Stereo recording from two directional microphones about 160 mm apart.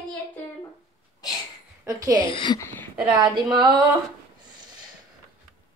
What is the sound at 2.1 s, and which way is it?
Speech, 30° left (ahead or behind).